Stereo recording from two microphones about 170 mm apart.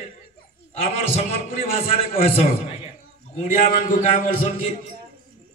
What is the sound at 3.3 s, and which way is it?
A man's voice, 45° left (ahead or behind).